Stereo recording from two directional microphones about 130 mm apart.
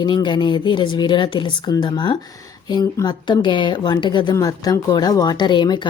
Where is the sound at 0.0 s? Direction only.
35° left (ahead or behind).